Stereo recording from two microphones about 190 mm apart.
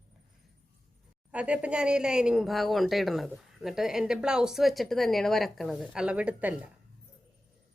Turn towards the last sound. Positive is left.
turn(degrees=-10)  # may be behind; listen again after turning